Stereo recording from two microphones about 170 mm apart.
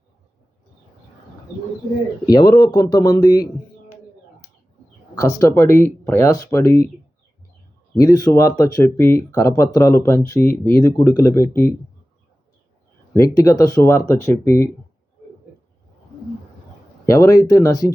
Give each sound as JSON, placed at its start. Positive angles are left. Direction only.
{"t": 2.5, "sound": "speech", "side_deg": 25}
{"t": 5.1, "sound": "speech", "side_deg": 20}
{"t": 7.9, "sound": "speech", "side_deg": 20}
{"t": 13.1, "sound": "speech", "side_deg": 20}
{"t": 17.1, "sound": "speech", "side_deg": 20}